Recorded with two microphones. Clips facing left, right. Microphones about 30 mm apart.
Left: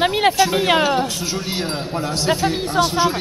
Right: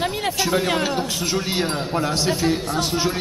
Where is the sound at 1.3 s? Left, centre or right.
Centre.